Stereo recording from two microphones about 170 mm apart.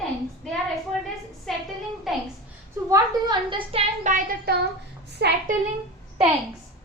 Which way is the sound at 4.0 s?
55° right (ahead or behind).